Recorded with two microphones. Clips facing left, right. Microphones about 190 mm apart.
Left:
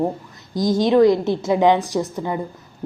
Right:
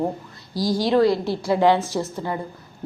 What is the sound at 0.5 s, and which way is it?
A woman's voice, 20° left (ahead or behind).